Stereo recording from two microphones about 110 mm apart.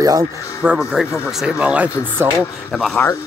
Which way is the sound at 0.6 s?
5° right (ahead or behind).